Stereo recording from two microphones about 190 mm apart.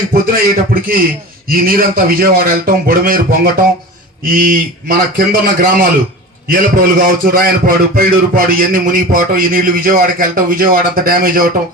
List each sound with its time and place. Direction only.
0.1 s a man's voice: 50° right (ahead or behind)